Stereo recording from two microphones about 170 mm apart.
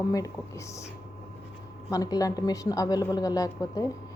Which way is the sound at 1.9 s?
20° left (ahead or behind).